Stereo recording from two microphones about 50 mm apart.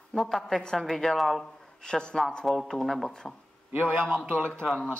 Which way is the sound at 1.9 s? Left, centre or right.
Centre.